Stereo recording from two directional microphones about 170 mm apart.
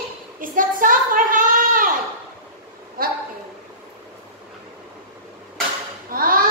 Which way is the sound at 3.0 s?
60° right (ahead or behind).